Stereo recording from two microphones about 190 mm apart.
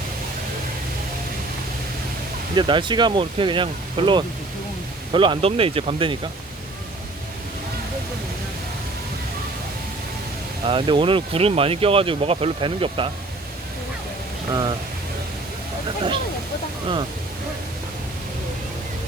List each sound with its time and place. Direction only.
2.6 s speech: 25° right (ahead or behind)
10.7 s speech: 25° right (ahead or behind)
14.5 s speech: 25° right (ahead or behind)